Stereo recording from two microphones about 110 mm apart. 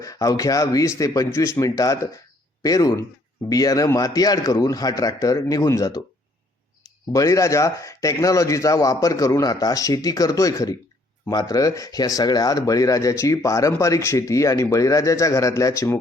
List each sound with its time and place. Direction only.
0.0 s speech: 30° left (ahead or behind)
7.1 s speech: 30° left (ahead or behind)